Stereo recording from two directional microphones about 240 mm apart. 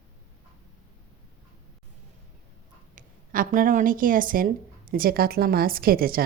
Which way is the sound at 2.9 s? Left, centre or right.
Right.